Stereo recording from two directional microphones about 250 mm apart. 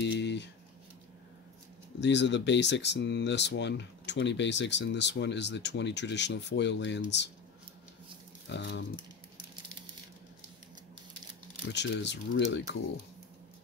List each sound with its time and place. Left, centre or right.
0.0 s a sound: left
2.0 s speech: left
8.5 s speech: left
11.7 s speech: left